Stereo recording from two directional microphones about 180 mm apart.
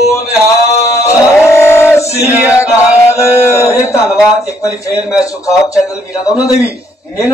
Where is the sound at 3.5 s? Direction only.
15° left (ahead or behind).